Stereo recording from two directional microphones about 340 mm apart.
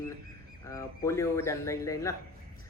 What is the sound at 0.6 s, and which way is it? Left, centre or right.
Speech, centre.